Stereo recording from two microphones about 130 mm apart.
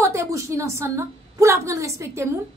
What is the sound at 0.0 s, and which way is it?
A woman's voice, 20° right (ahead or behind).